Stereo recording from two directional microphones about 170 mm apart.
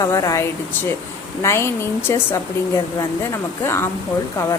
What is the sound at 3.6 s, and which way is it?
Speech, 15° left (ahead or behind).